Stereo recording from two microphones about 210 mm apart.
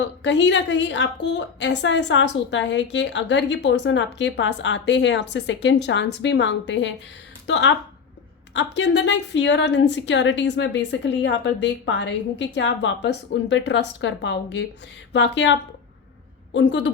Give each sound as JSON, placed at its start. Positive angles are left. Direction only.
{"t": 0.0, "sound": "a woman's voice", "side_deg": 55}
{"t": 16.6, "sound": "a woman's voice", "side_deg": 55}